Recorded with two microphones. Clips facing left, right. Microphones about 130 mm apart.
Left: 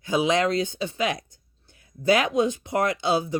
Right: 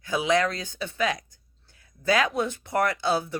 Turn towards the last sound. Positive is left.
turn(degrees=20)  # may be behind; listen again after turning